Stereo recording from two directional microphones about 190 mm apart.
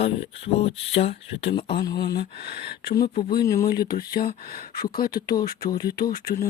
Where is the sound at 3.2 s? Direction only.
20° left (ahead or behind).